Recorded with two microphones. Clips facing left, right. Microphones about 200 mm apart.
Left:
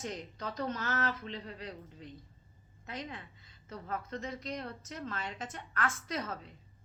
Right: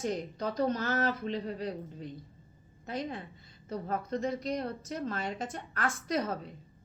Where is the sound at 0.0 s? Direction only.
35° right (ahead or behind).